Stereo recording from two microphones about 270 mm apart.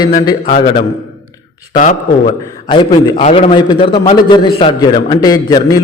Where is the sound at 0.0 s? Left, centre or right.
Centre.